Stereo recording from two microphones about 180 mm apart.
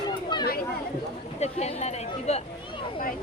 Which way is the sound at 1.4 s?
35° left (ahead or behind).